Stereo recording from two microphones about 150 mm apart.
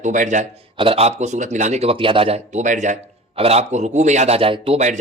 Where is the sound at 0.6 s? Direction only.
40° right (ahead or behind).